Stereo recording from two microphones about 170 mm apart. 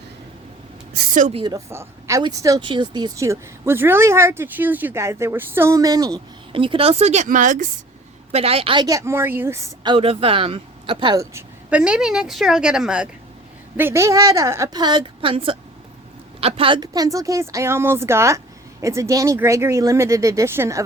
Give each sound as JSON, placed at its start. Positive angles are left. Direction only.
{"t": 0.9, "sound": "a woman's voice", "side_deg": -50}
{"t": 1.3, "sound": "speech", "side_deg": -30}
{"t": 1.5, "sound": "speech", "side_deg": -15}
{"t": 8.3, "sound": "speech", "side_deg": -35}
{"t": 9.8, "sound": "speech", "side_deg": -30}
{"t": 11.7, "sound": "a woman's voice", "side_deg": -5}